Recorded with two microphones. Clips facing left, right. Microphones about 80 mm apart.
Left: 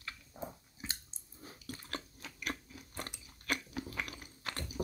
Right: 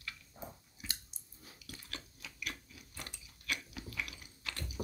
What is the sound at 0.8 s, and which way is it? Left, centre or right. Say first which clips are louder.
Chewing: left 3 dB; left.